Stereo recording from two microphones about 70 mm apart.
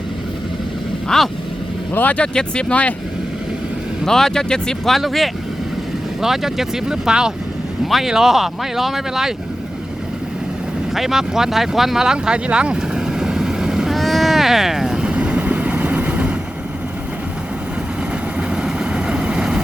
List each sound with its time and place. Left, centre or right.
1.0 s speech: centre
1.9 s speech: left
2.1 s speech: centre
4.0 s speech: centre
10.9 s a sound: centre
18.3 s vehicle: centre